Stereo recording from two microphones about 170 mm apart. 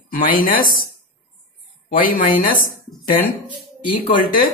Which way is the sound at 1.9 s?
55° left (ahead or behind).